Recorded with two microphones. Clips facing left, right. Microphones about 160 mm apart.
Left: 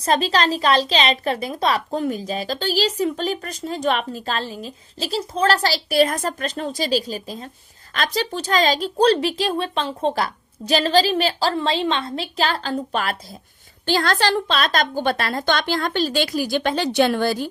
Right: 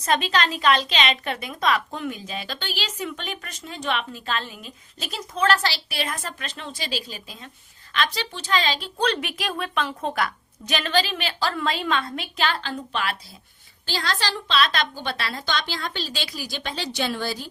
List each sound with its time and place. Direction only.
0.0 s a woman's voice: 35° left (ahead or behind)
13.8 s a woman's voice: 55° left (ahead or behind)